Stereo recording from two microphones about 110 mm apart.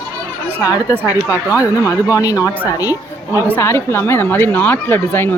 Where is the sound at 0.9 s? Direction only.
20° right (ahead or behind).